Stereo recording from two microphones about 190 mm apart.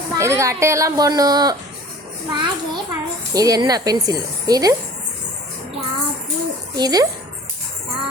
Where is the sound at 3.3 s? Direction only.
20° right (ahead or behind).